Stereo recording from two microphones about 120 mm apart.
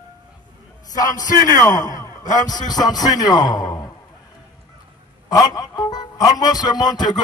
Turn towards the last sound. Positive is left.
turn(degrees=35)  # may be behind; listen again after turning